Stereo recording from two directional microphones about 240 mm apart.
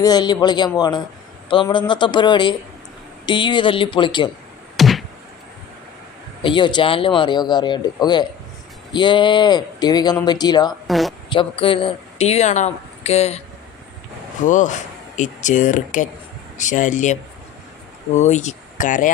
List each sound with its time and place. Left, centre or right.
0.0 s speech: centre
4.8 s a sound: centre
6.4 s speech: centre
10.8 s a sound: centre
11.3 s speech: left
14.4 s speech: left
18.2 s speech: left